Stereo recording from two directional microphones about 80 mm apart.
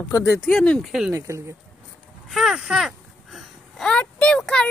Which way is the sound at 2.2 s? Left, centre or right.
Centre.